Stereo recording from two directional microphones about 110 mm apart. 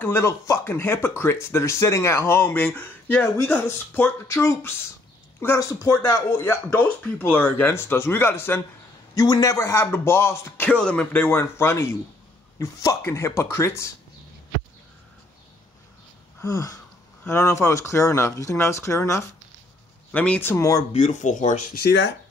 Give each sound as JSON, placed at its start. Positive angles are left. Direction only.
{"t": 0.0, "sound": "speech", "side_deg": 20}
{"t": 9.1, "sound": "speech", "side_deg": 35}
{"t": 10.7, "sound": "speech", "side_deg": 10}
{"t": 16.3, "sound": "a sound", "side_deg": 30}
{"t": 17.2, "sound": "speech", "side_deg": 25}
{"t": 20.5, "sound": "speech", "side_deg": 30}
{"t": 20.9, "sound": "speech", "side_deg": 90}